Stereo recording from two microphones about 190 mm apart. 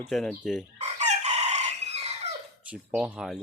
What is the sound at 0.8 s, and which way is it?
Chicken, 35° right (ahead or behind).